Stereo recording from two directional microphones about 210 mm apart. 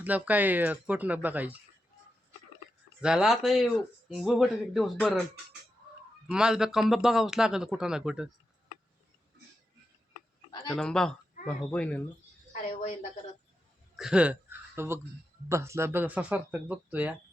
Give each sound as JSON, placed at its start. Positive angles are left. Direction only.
{"t": 0.0, "sound": "speech", "side_deg": -5}
{"t": 3.0, "sound": "speech", "side_deg": -5}
{"t": 6.3, "sound": "speech", "side_deg": -5}
{"t": 10.8, "sound": "speech", "side_deg": 5}
{"t": 12.6, "sound": "a sound", "side_deg": 40}
{"t": 13.9, "sound": "speech", "side_deg": -5}